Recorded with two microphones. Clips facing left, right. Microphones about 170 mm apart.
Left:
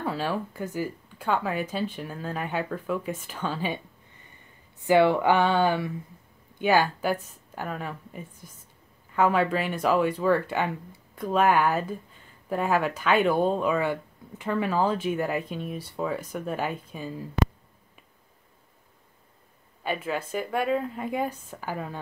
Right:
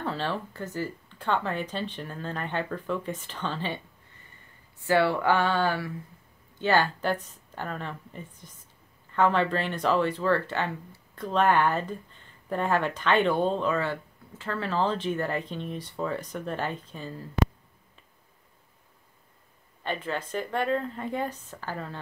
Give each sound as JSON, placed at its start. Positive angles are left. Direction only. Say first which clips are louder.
{"t": 0.0, "sound": "speech", "louder": "left 2 dB", "side_deg": 10}
{"t": 19.8, "sound": "speech", "louder": "left 2 dB", "side_deg": 10}